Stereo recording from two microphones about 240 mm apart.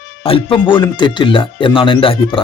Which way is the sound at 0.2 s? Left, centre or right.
Left.